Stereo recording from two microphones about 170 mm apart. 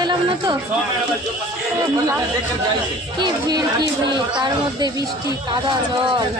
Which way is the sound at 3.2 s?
25° right (ahead or behind).